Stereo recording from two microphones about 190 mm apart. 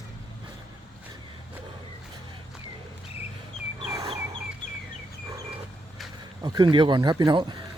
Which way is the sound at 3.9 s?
15° right (ahead or behind).